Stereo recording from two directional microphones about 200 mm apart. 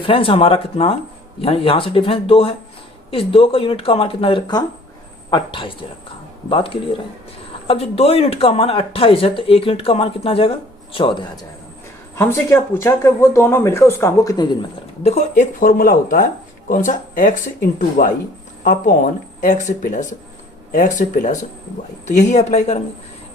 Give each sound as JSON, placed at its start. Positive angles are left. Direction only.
{"t": 0.0, "sound": "speech", "side_deg": 25}
{"t": 12.1, "sound": "speech", "side_deg": 15}
{"t": 15.1, "sound": "speech", "side_deg": 40}